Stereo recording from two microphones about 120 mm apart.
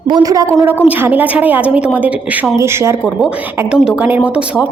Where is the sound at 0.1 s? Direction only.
30° right (ahead or behind).